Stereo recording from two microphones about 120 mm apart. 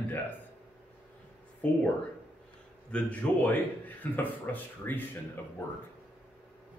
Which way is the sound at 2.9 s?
10° left (ahead or behind).